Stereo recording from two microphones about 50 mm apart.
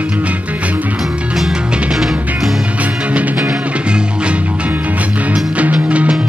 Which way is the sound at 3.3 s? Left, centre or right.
Centre.